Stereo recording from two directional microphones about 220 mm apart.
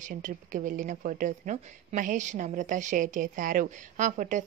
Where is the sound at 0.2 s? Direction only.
35° right (ahead or behind).